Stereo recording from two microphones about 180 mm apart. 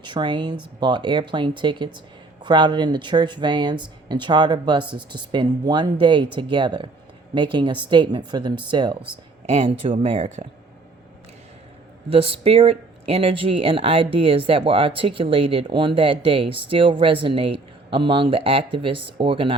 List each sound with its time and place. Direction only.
0.0 s speech: 25° right (ahead or behind)
12.0 s speech: 30° right (ahead or behind)